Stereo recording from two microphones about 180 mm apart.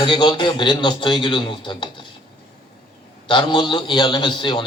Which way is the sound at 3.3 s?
25° left (ahead or behind).